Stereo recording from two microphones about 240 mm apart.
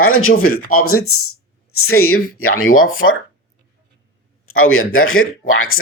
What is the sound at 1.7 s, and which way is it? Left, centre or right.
Speech, left.